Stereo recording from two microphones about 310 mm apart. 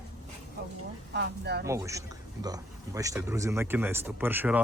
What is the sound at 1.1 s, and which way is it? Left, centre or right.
Speech, right.